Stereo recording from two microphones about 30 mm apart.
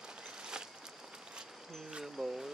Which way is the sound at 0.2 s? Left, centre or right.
Right.